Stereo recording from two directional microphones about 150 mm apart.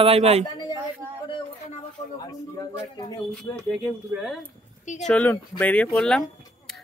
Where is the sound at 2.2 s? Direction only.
25° left (ahead or behind).